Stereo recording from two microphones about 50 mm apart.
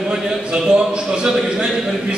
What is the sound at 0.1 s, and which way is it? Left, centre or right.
A man's voice, centre.